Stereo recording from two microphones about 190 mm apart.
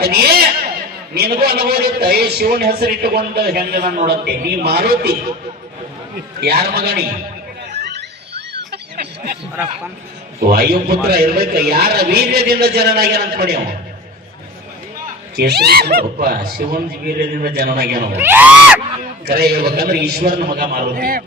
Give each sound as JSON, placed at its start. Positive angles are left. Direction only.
{"t": 0.0, "sound": "a sound", "side_deg": -55}
{"t": 1.1, "sound": "a man's voice", "side_deg": -55}
{"t": 6.4, "sound": "a man's voice", "side_deg": -55}
{"t": 7.8, "sound": "a sound", "side_deg": -60}
{"t": 10.4, "sound": "a man's voice", "side_deg": -55}
{"t": 15.4, "sound": "a man's voice", "side_deg": -55}
{"t": 18.2, "sound": "speech", "side_deg": -10}
{"t": 19.2, "sound": "a man's voice", "side_deg": -55}